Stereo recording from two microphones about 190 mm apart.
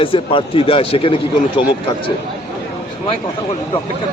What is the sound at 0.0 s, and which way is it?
A man's voice, 30° left (ahead or behind).